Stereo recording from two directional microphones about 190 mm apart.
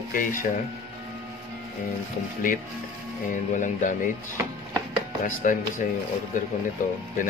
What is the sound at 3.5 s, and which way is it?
Speech, 40° left (ahead or behind).